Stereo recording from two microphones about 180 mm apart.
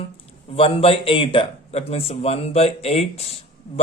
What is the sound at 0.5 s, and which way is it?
Speech, 30° left (ahead or behind).